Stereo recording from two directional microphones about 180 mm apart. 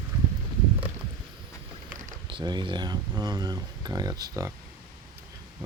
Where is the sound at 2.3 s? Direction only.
25° right (ahead or behind).